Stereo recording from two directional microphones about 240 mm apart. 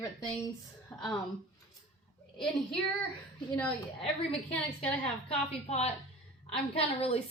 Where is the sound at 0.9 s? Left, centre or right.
Centre.